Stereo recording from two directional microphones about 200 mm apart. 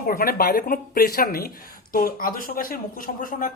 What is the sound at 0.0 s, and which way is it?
Speech, 45° left (ahead or behind).